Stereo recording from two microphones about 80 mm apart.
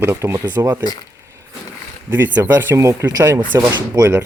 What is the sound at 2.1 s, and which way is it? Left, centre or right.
Speech, right.